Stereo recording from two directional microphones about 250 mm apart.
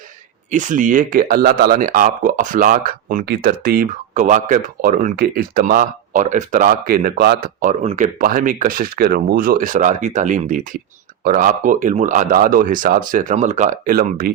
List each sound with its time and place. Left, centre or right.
0.5 s speech: right